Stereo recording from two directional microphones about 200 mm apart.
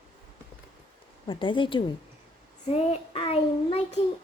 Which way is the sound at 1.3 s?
25° left (ahead or behind).